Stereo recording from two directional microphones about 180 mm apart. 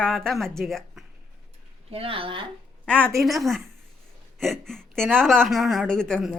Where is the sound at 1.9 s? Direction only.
30° right (ahead or behind).